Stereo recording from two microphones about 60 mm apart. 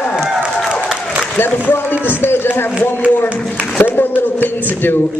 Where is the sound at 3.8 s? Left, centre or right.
Left.